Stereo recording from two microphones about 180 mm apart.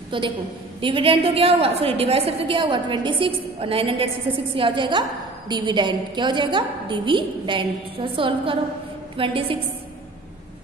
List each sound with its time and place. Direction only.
0.1 s a woman's voice: 25° right (ahead or behind)